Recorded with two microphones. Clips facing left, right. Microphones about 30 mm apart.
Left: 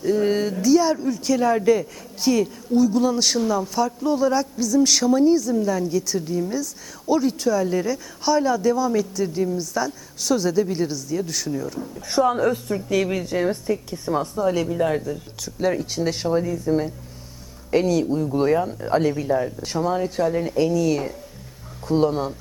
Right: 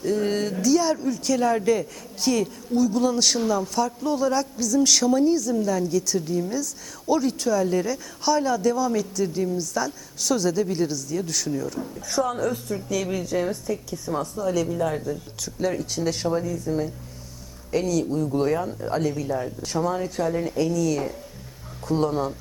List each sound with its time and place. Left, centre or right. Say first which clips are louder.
0.0 s speech: left 3 dB; centre
12.0 s a woman's voice: left 5 dB; left
13.5 s a woman's voice: left 4 dB; left